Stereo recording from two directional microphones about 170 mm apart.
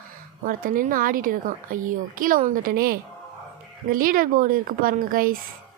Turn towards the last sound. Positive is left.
turn(degrees=-55)  # may be behind; listen again after turning